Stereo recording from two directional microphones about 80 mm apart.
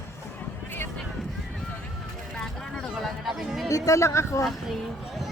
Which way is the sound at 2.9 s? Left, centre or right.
Centre.